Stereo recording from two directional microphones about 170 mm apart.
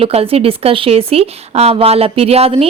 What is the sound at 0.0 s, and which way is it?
A woman's voice, 35° right (ahead or behind).